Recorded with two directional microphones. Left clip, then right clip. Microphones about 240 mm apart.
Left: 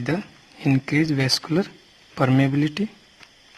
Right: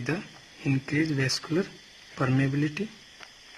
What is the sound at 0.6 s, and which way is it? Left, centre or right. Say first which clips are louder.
Speech: left 6 dB; left.